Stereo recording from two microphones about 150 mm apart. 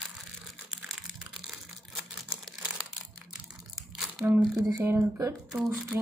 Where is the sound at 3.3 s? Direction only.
Centre (ahead or behind).